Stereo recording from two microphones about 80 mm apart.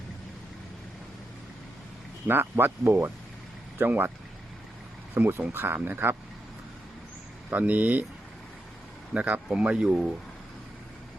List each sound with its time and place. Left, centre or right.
2.2 s speech: right
5.1 s speech: right
7.5 s speech: centre
9.1 s speech: centre